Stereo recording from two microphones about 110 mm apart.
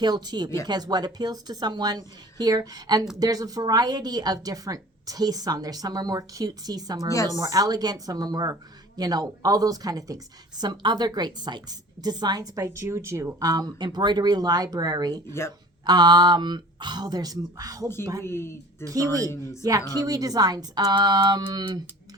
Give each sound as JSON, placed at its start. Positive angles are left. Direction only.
{"t": 0.0, "sound": "a woman's voice", "side_deg": -40}
{"t": 18.2, "sound": "speech", "side_deg": 25}
{"t": 18.9, "sound": "a woman's voice", "side_deg": -30}